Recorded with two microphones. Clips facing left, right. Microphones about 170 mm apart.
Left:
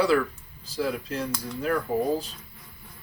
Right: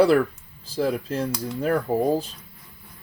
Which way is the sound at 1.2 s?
30° right (ahead or behind).